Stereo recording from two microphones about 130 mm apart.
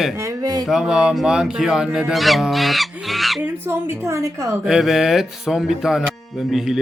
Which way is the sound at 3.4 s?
15° right (ahead or behind).